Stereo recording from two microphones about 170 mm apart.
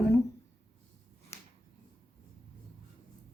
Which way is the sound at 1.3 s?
15° left (ahead or behind).